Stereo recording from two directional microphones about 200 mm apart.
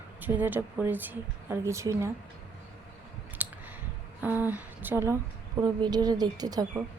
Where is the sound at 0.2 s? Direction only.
10° right (ahead or behind).